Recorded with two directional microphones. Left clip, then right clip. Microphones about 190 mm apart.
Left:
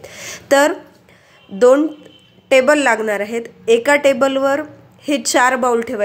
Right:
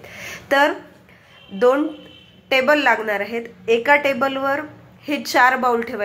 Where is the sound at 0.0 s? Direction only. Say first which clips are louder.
Left 2 dB; 50° left (ahead or behind).